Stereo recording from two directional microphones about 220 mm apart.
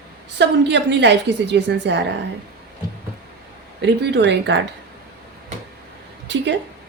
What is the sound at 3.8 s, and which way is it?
Speech, 50° right (ahead or behind).